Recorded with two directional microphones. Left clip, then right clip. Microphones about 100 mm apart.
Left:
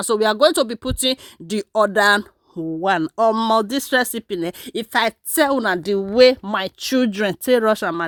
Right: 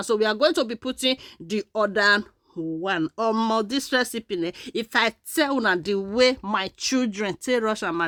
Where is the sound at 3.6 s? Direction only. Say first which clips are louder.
Left 5 dB; 50° left (ahead or behind).